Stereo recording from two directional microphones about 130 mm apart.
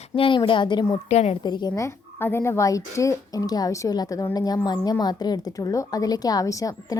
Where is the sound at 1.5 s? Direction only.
35° left (ahead or behind).